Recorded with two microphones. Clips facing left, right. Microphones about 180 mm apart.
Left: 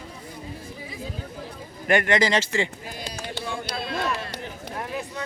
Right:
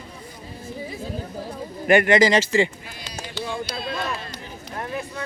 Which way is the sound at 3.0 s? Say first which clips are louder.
Right 2 dB; 55° left (ahead or behind).